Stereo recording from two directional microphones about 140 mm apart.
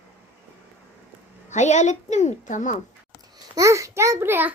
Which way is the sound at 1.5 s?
55° left (ahead or behind).